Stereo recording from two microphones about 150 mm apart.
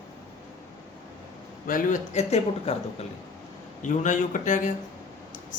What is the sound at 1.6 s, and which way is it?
Speech, 65° left (ahead or behind).